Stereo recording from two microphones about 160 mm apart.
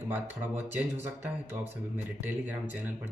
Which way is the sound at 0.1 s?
10° right (ahead or behind).